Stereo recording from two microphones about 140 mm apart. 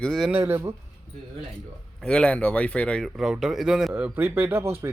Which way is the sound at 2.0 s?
5° left (ahead or behind).